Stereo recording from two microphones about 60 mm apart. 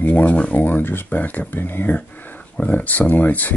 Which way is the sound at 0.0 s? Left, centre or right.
Left.